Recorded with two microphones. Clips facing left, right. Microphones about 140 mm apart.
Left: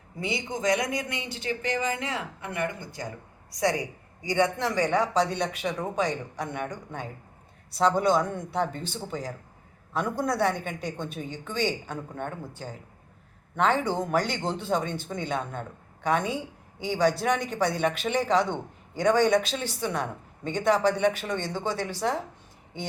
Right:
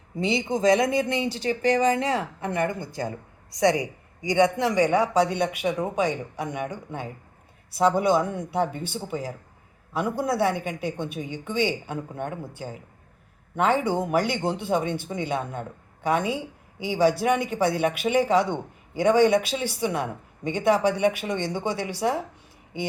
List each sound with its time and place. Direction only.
0.2 s speech: 25° right (ahead or behind)
3.5 s speech: 20° right (ahead or behind)